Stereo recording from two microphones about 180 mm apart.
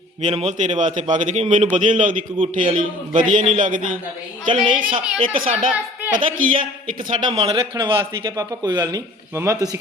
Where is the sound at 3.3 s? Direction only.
45° right (ahead or behind).